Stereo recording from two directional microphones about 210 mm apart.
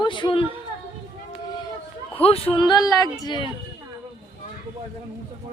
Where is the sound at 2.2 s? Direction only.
30° left (ahead or behind).